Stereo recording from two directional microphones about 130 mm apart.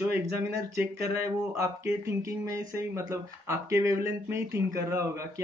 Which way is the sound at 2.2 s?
25° right (ahead or behind).